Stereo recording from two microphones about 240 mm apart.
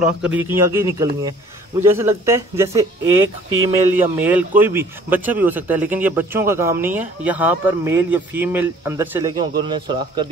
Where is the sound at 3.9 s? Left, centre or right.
Centre.